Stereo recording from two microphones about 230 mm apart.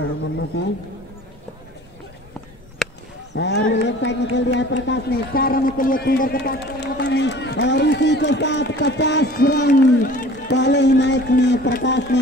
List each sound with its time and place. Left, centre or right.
0.0 s speech: left
2.8 s a sound: centre
3.3 s speech: left
10.5 s speech: left